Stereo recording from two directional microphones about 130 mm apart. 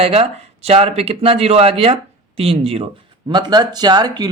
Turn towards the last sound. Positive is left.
turn(degrees=-30)  # may be behind; listen again after turning